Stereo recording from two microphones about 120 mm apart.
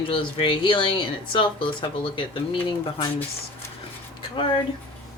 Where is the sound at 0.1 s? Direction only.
45° left (ahead or behind).